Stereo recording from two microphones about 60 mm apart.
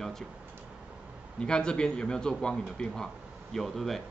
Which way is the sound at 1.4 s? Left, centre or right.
Centre.